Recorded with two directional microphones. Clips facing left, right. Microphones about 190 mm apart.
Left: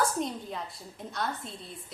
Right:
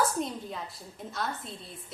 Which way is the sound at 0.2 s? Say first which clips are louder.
Even; centre (ahead or behind).